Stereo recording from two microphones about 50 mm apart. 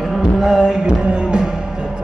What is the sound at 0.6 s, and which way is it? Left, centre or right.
Music, centre.